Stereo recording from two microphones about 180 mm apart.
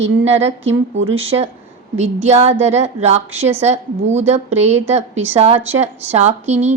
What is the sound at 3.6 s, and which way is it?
A woman's voice, 40° right (ahead or behind).